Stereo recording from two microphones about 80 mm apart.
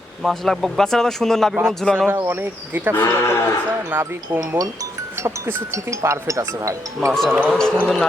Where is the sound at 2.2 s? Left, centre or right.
Right.